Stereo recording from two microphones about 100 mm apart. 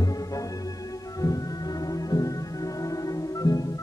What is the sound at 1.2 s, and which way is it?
Music, 35° left (ahead or behind).